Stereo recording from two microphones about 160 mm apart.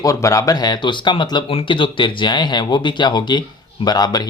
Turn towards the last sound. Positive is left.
turn(degrees=25)  # may be behind; listen again after turning